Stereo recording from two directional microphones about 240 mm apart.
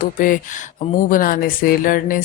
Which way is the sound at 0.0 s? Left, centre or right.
Left.